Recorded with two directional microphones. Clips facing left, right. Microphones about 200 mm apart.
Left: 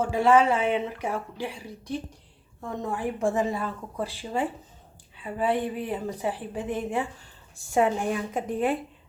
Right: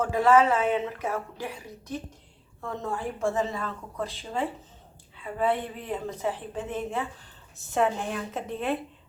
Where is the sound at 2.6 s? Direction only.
15° left (ahead or behind).